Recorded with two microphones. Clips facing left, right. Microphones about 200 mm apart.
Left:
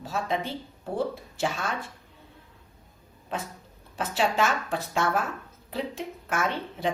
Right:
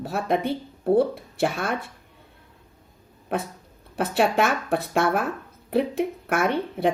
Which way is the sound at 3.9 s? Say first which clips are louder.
Right 5 dB; 60° right (ahead or behind).